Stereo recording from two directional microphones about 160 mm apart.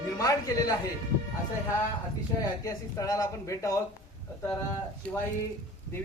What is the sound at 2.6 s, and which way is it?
Speech, 20° left (ahead or behind).